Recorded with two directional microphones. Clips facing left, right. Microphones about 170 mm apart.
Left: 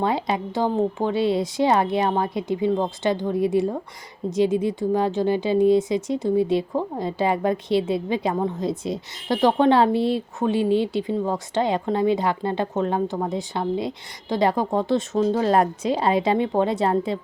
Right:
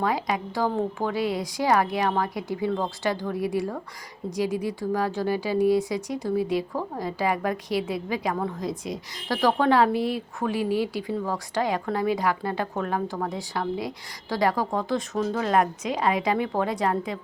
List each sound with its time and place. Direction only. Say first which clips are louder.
0.0 s speech: left 3 dB; 25° left (ahead or behind)